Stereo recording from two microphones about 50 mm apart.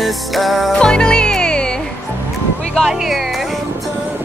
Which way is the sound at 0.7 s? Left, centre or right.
Centre.